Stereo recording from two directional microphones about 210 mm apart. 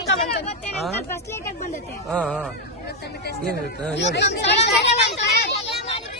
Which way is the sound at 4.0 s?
55° left (ahead or behind).